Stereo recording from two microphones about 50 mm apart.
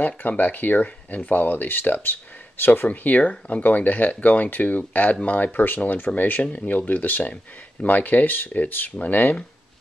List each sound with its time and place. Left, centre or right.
0.0 s speech: left